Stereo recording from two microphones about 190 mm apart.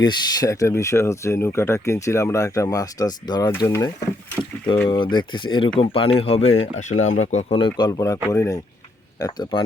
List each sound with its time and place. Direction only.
0.0 s speech: 20° left (ahead or behind)